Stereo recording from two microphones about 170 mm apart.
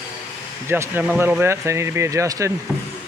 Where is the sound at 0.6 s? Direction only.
15° right (ahead or behind).